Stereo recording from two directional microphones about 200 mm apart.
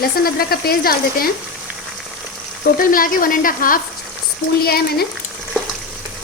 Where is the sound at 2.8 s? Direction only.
45° left (ahead or behind).